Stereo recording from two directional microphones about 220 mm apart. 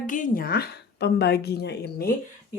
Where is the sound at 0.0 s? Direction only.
35° left (ahead or behind).